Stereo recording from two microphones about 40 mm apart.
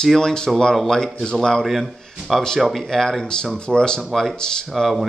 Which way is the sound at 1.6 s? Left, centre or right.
Centre.